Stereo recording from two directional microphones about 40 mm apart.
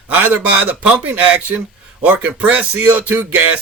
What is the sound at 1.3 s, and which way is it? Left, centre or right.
A man's voice, right.